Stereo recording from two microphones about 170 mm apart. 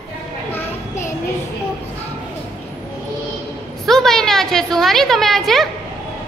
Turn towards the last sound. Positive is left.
turn(degrees=0)  # may be behind; listen again after turning